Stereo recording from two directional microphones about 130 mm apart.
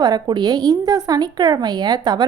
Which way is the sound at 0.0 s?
30° right (ahead or behind).